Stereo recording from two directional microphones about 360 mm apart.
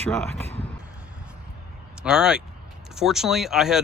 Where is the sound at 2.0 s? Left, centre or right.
Centre.